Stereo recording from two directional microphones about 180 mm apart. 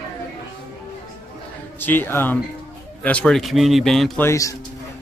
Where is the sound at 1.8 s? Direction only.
10° left (ahead or behind).